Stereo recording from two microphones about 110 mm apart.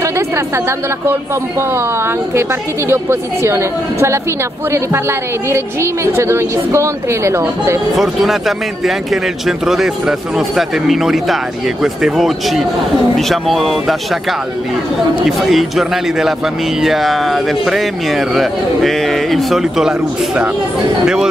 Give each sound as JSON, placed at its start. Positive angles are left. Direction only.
{"t": 1.7, "sound": "a woman's voice", "side_deg": -20}
{"t": 5.5, "sound": "a woman's voice", "side_deg": -25}
{"t": 7.9, "sound": "a man's voice", "side_deg": 0}
{"t": 15.2, "sound": "a man's voice", "side_deg": 0}